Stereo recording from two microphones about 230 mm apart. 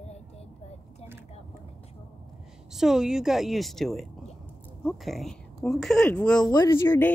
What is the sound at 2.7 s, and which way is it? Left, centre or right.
Speech, centre.